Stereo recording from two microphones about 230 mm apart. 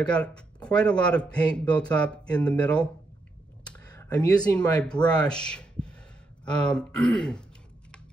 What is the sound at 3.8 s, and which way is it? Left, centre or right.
Speech, centre.